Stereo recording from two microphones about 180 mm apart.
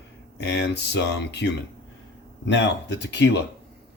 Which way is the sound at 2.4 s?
85° left.